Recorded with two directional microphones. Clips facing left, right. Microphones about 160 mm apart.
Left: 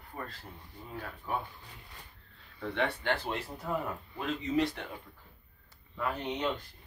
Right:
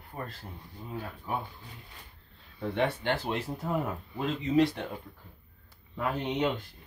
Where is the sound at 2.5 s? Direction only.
20° right (ahead or behind).